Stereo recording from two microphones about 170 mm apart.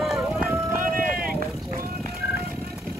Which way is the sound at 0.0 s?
Centre (ahead or behind).